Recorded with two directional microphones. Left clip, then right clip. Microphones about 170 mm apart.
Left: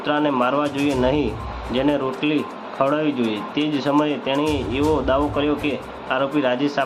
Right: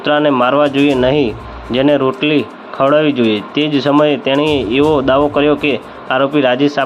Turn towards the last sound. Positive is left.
turn(degrees=-40)  # may be behind; listen again after turning